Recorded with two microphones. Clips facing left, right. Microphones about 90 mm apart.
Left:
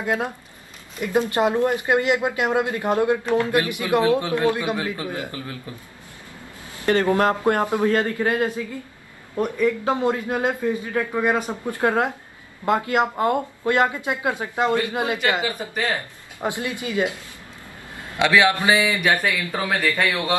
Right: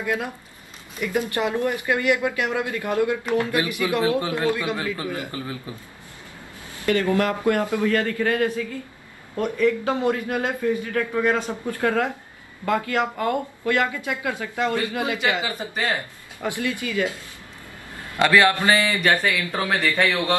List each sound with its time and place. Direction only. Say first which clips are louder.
0.0 s speech: left 2 dB; 25° left (ahead or behind)
6.9 s speech: left 2 dB; 25° left (ahead or behind)
18.3 s speech: even; 15° left (ahead or behind)